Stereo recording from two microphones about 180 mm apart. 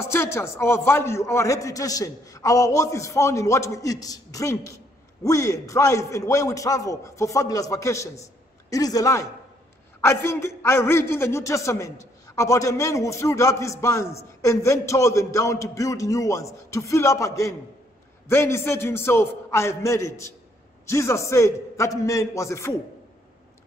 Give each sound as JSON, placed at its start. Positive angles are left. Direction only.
{"t": 0.1, "sound": "a man's voice", "side_deg": 15}